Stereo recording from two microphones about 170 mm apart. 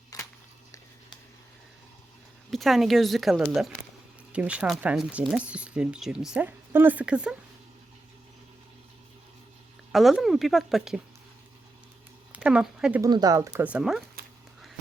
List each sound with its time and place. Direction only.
0.1 s a sound: 20° left (ahead or behind)
2.5 s speech: centre (ahead or behind)
9.9 s speech: centre (ahead or behind)
12.3 s speech: 5° right (ahead or behind)
13.0 s speech: 25° right (ahead or behind)
13.7 s speech: 5° right (ahead or behind)